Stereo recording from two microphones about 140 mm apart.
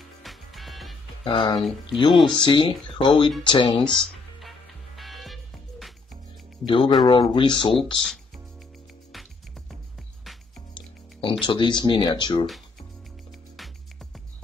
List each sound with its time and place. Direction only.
0.2 s music: centre (ahead or behind)
1.2 s speech: 40° left (ahead or behind)
1.6 s speech: centre (ahead or behind)
2.3 s speech: 35° left (ahead or behind)
3.8 s music: 5° left (ahead or behind)
6.6 s speech: 35° left (ahead or behind)
11.2 s speech: 35° left (ahead or behind)